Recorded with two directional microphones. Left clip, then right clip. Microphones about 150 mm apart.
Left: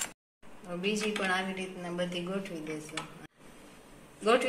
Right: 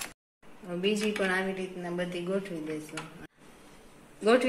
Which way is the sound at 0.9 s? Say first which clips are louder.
Right 1 dB; 65° right (ahead or behind).